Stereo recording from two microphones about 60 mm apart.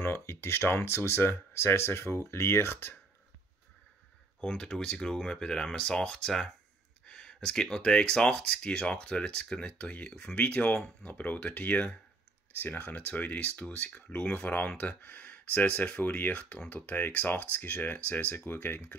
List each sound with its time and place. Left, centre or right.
0.0 s speech: left
4.4 s speech: centre
10.7 s speech: centre
11.1 s speech: left